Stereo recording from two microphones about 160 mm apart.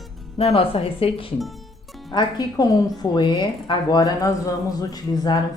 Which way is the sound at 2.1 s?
25° left (ahead or behind).